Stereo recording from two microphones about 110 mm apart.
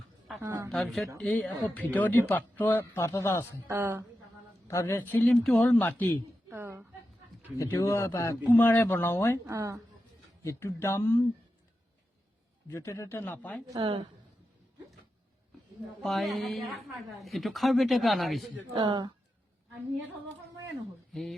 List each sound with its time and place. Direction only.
0.3 s a woman's voice: 25° right (ahead or behind)
0.7 s speech: 5° left (ahead or behind); by 3.4 s 25° left (ahead or behind)
3.7 s a woman's voice: 20° right (ahead or behind)
4.7 s speech: 25° left (ahead or behind)
6.5 s a sound: 20° right (ahead or behind)
7.6 s a man's voice: 25° left (ahead or behind)
9.5 s a woman's voice: 30° right (ahead or behind)
10.4 s a man's voice: 25° left (ahead or behind)
12.6 s a man's voice: 25° left (ahead or behind)
13.7 s speech: 50° right (ahead or behind)
16.0 s speech: centre (ahead or behind)
18.7 s speech: 45° right (ahead or behind)
21.1 s a sound: centre (ahead or behind)